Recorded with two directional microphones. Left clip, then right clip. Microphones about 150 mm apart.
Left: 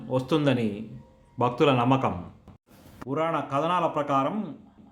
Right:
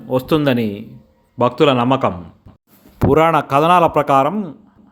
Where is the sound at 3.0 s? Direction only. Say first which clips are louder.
Right 14 dB; 90° right; by 4.3 s 75° right (ahead or behind).